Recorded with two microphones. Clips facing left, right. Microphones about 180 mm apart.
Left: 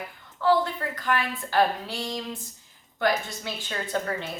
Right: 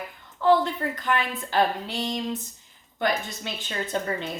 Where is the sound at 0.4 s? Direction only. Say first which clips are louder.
Right 2 dB; 20° right (ahead or behind).